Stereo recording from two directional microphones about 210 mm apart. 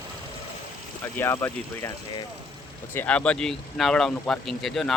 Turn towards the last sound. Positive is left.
turn(degrees=0)  # may be behind; listen again after turning